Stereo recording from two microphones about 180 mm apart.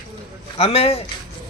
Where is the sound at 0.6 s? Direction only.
35° left (ahead or behind).